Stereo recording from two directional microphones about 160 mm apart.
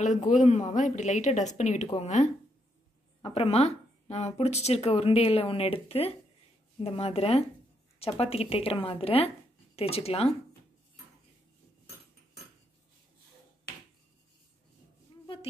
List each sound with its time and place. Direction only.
0.0 s a woman's voice: 50° left (ahead or behind)